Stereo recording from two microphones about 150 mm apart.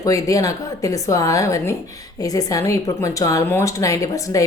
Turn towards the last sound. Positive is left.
turn(degrees=20)  # may be behind; listen again after turning